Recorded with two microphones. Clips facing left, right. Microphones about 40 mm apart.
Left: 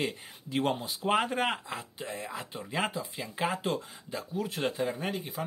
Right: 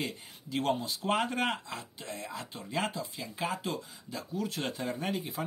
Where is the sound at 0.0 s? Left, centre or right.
Left.